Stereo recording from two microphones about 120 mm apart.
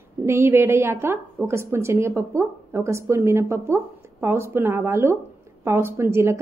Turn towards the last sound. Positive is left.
turn(degrees=-20)  # may be behind; listen again after turning